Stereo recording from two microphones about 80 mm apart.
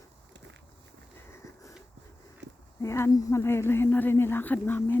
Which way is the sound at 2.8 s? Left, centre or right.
Left.